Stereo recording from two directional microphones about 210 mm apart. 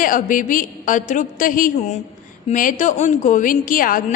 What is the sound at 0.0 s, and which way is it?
A woman's voice, 40° left (ahead or behind).